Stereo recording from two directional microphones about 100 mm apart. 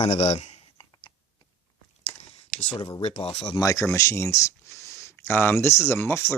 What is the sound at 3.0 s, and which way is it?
Speech, 90° left.